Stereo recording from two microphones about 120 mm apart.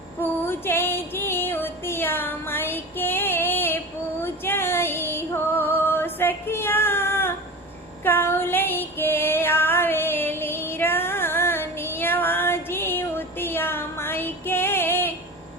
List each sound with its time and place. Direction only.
0.2 s music: 20° left (ahead or behind)
4.2 s female singing: 20° left (ahead or behind)